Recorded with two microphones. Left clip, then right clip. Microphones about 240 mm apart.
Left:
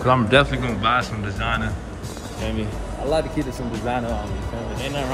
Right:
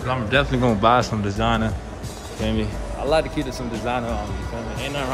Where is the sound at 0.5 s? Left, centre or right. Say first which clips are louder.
Right 4 dB; right.